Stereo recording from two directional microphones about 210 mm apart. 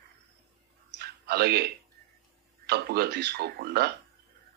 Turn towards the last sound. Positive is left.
turn(degrees=-50)  # may be behind; listen again after turning